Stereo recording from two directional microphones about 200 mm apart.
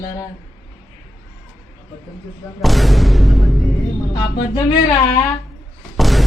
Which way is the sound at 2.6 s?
Centre (ahead or behind).